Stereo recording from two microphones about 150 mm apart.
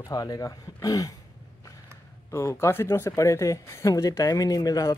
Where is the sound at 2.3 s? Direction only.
20° left (ahead or behind).